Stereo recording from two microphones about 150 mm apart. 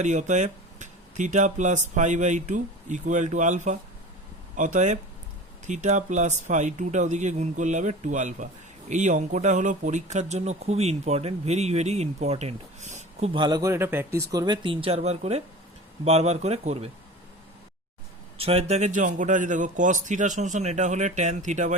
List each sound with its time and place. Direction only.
0.0 s speech: 55° right (ahead or behind)
18.3 s speech: 40° right (ahead or behind)